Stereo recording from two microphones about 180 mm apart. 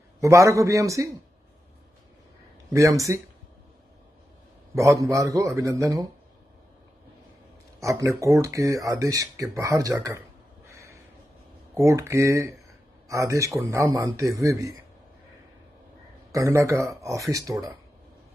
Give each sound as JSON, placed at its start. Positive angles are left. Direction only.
{"t": 0.2, "sound": "speech", "side_deg": -15}
{"t": 2.7, "sound": "speech", "side_deg": -15}
{"t": 4.7, "sound": "speech", "side_deg": -15}
{"t": 7.8, "sound": "speech", "side_deg": -15}
{"t": 10.7, "sound": "a sound", "side_deg": -15}
{"t": 11.7, "sound": "speech", "side_deg": -15}
{"t": 16.3, "sound": "speech", "side_deg": -15}